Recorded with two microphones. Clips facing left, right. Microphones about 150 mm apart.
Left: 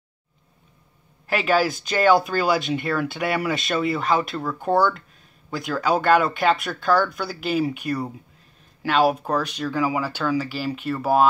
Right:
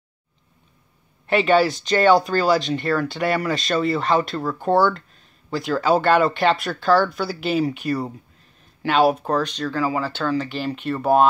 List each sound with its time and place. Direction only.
1.2 s speech: centre (ahead or behind)